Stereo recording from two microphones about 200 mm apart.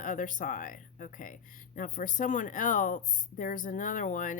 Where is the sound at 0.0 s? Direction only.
40° left (ahead or behind).